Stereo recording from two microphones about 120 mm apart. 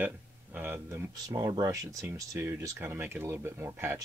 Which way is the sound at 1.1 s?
30° right (ahead or behind).